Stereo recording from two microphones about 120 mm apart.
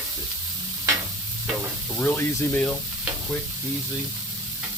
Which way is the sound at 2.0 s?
15° left (ahead or behind).